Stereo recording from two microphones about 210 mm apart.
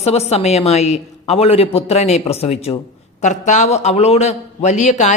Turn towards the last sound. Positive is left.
turn(degrees=35)  # may be behind; listen again after turning